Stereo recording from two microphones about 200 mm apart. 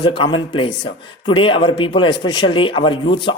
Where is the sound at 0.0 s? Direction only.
25° left (ahead or behind).